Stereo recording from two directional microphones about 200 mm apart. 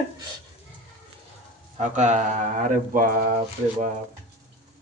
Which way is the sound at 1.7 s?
35° right (ahead or behind).